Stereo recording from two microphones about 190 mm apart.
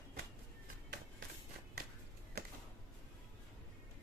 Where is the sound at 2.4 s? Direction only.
55° right (ahead or behind).